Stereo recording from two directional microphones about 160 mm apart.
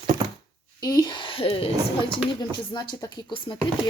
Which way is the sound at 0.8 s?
25° left (ahead or behind).